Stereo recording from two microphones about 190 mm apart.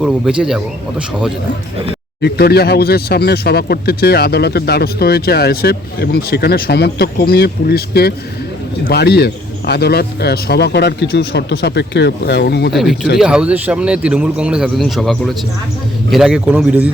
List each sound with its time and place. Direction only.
0.0 s speech: 5° right (ahead or behind)
2.2 s speech: 55° left (ahead or behind)
12.7 s speech: centre (ahead or behind)